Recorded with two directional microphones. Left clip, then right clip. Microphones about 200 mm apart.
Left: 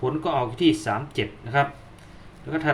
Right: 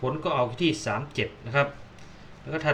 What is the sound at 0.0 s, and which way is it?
Speech, 15° left (ahead or behind).